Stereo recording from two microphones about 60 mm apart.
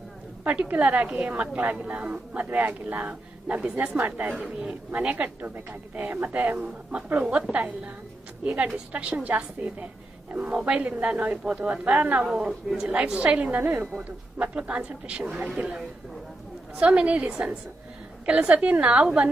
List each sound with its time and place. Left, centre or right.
0.4 s a woman's voice: right
8.4 s a woman's voice: right
11.9 s a woman's voice: right
12.2 s a woman's voice: centre
13.6 s a woman's voice: right
14.3 s a woman's voice: right
16.8 s a woman's voice: centre